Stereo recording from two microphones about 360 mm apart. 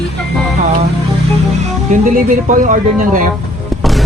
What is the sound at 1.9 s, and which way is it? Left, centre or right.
Speech, right.